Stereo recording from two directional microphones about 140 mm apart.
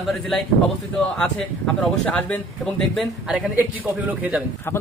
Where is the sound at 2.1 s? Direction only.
10° left (ahead or behind).